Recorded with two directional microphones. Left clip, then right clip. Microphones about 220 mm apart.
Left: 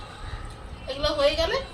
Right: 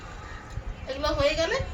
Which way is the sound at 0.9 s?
10° right (ahead or behind).